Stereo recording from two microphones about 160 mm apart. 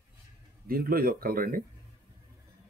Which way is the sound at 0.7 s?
65° right (ahead or behind).